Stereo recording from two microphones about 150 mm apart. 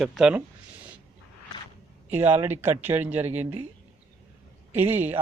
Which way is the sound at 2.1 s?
15° right (ahead or behind).